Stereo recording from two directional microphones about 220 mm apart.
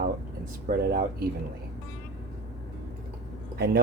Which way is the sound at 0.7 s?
35° right (ahead or behind).